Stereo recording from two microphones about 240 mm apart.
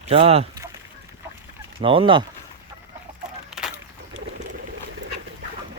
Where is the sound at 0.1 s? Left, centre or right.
Right.